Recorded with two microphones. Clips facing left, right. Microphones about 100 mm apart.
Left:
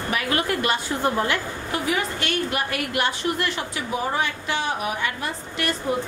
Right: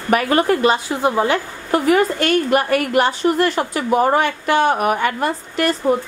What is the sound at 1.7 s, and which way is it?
A woman's voice, 50° right (ahead or behind).